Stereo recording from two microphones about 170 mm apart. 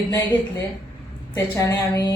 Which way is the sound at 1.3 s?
15° left (ahead or behind).